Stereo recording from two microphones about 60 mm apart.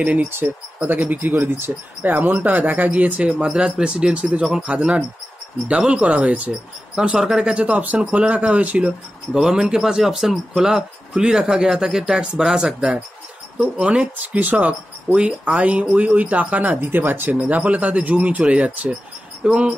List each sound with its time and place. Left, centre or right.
0.0 s speech: right
1.3 s speech: right
7.0 s speech: centre
7.6 s speech: right